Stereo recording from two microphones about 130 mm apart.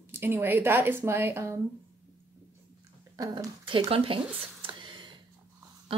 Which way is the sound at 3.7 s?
45° right (ahead or behind).